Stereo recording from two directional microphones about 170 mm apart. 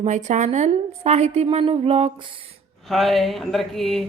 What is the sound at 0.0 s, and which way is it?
A woman's voice, 45° right (ahead or behind).